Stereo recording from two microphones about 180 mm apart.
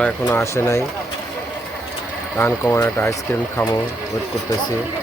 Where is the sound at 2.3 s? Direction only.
10° left (ahead or behind).